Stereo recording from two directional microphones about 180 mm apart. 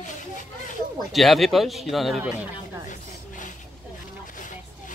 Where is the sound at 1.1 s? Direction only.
Centre (ahead or behind).